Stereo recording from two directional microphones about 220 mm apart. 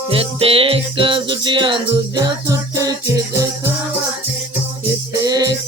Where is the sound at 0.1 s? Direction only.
25° right (ahead or behind).